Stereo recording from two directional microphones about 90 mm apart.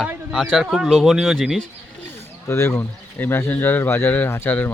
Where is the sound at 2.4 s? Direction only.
30° left (ahead or behind).